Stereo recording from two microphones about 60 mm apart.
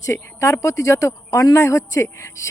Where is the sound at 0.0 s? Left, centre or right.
Left.